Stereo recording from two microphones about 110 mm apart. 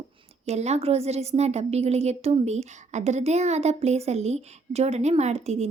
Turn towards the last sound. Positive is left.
turn(degrees=-85)